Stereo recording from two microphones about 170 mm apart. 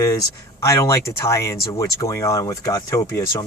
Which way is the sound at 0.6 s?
20° left (ahead or behind).